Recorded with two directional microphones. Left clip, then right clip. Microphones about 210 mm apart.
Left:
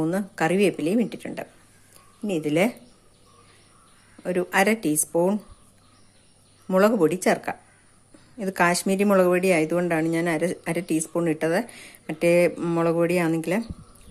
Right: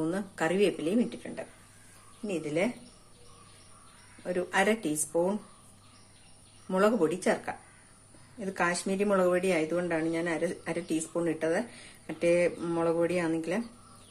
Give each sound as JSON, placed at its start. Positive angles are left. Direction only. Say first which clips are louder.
{"t": 0.0, "sound": "a woman's voice", "louder": "left 6 dB", "side_deg": 30}
{"t": 2.2, "sound": "speech", "louder": "left 8 dB", "side_deg": 50}
{"t": 4.2, "sound": "a woman's voice", "louder": "left 6 dB", "side_deg": 35}
{"t": 6.7, "sound": "a woman's voice", "louder": "left 7 dB", "side_deg": 30}